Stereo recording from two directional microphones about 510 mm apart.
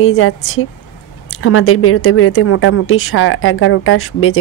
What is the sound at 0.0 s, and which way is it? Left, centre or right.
A woman's voice, left.